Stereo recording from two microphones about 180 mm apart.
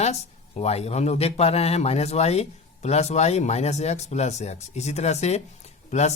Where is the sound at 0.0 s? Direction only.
35° left (ahead or behind).